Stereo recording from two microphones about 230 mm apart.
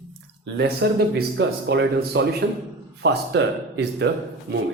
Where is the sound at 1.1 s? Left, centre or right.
Right.